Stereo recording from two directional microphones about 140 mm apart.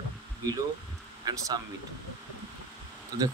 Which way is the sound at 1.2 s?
30° right (ahead or behind).